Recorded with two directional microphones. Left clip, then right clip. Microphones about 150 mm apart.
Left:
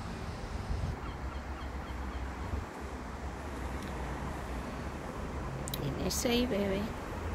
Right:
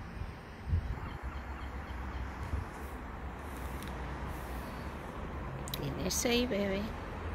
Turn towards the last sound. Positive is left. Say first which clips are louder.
# left 1 dB
turn(degrees=-15)  # may be behind; listen again after turning